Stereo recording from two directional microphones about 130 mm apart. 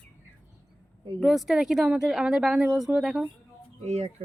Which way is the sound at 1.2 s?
5° right (ahead or behind).